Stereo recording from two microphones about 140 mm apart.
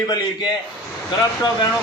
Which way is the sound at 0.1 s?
30° left (ahead or behind).